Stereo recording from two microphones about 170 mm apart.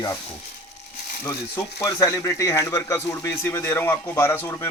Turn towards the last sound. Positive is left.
turn(degrees=15)  # may be behind; listen again after turning